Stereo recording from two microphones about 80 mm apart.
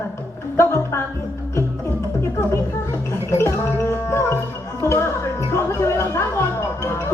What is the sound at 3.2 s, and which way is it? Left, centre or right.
Music, left.